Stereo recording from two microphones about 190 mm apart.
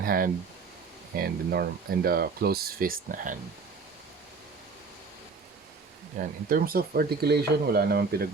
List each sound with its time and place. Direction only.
0.0 s speech: 50° right (ahead or behind)
6.1 s speech: 45° right (ahead or behind)